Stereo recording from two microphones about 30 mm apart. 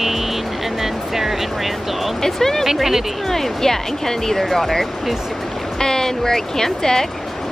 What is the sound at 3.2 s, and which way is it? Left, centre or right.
Speech, centre.